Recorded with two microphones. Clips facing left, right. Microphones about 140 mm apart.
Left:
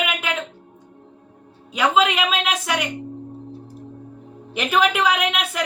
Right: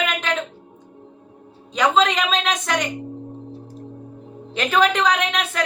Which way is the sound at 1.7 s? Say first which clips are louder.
Right 1 dB; 5° left (ahead or behind).